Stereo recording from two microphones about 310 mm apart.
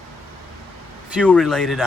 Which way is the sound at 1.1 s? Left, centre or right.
Centre.